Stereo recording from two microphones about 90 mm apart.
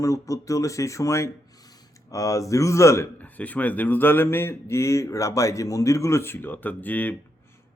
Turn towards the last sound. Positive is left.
turn(degrees=20)  # may be behind; listen again after turning